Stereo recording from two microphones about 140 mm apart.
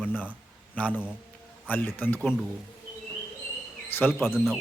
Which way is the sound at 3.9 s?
15° left (ahead or behind).